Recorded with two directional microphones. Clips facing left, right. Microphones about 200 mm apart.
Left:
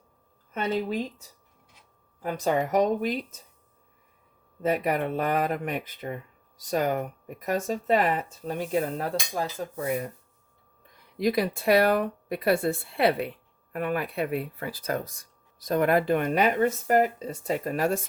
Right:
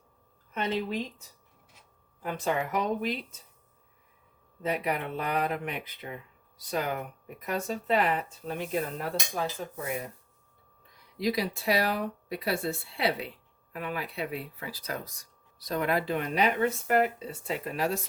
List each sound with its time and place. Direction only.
0.5 s speech: 40° left (ahead or behind)
2.2 s speech: 40° left (ahead or behind)
4.6 s speech: 50° left (ahead or behind)
10.9 s speech: 55° left (ahead or behind)